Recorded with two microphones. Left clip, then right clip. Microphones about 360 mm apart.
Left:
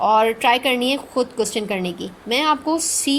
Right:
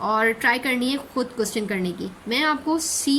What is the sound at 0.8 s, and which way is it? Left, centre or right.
Speech, centre.